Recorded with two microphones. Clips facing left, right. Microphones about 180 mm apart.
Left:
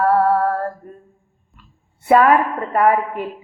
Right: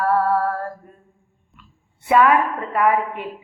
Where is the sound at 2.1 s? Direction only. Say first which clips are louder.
Left 3 dB; 40° left (ahead or behind).